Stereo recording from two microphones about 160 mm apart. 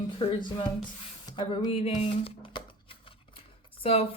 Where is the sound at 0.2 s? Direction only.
35° left (ahead or behind).